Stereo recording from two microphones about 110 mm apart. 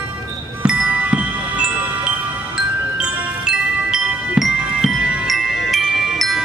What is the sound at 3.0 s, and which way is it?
Music, 5° right (ahead or behind).